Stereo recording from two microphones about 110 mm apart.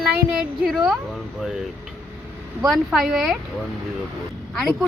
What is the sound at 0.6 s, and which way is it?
Speech, 5° right (ahead or behind).